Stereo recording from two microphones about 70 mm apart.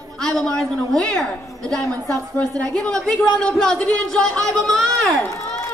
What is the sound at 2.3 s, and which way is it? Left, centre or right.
Speech, left.